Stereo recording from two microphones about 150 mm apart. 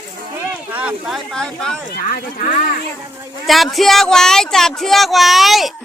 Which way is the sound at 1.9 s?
75° left (ahead or behind).